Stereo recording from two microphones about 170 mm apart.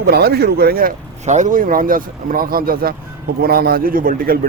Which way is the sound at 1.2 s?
45° right (ahead or behind).